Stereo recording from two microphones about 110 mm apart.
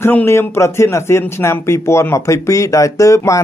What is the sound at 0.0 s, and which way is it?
A man's voice, 20° left (ahead or behind).